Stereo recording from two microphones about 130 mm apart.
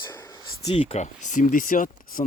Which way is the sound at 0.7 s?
50° left (ahead or behind).